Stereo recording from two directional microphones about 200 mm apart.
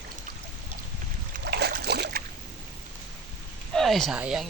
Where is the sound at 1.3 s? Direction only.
55° right (ahead or behind).